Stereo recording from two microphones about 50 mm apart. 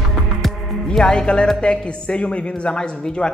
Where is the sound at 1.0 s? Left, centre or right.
Centre.